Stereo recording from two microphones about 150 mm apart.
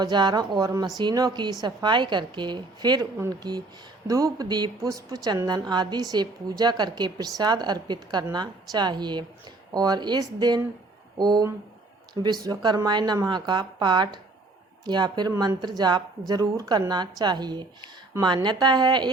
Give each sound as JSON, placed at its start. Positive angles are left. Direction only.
{"t": 0.0, "sound": "a woman's voice", "side_deg": -30}